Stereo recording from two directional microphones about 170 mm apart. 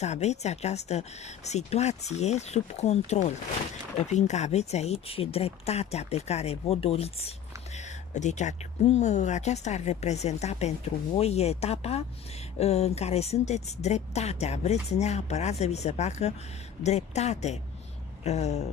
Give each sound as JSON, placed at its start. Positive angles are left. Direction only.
{"t": 0.0, "sound": "speech", "side_deg": 40}